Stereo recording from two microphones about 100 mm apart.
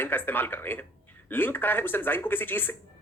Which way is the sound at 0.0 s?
20° left (ahead or behind).